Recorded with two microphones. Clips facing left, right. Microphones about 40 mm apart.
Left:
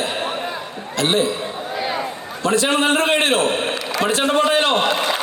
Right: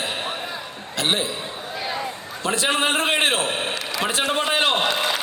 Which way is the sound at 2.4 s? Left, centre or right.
Centre.